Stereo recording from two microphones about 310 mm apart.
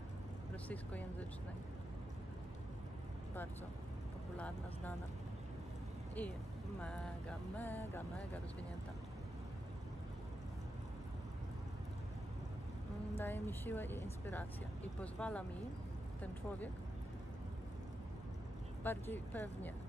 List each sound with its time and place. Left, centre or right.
6.8 s vehicle: centre
13.2 s speech: centre
15.0 s vehicle: centre
18.9 s speech: centre